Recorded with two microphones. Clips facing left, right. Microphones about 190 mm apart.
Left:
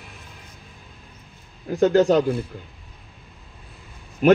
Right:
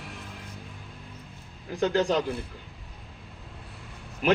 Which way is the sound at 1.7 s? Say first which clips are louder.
Left 8 dB; 45° left (ahead or behind).